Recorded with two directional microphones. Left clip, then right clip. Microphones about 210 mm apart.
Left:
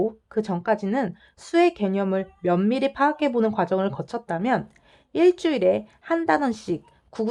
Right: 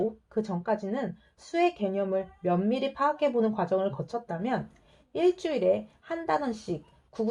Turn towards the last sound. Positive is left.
turn(degrees=35)  # may be behind; listen again after turning